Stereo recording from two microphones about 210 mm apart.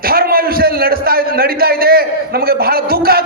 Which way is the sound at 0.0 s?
45° right (ahead or behind).